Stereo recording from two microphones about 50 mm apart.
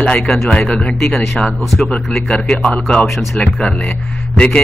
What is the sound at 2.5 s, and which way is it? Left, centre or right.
Speech, centre.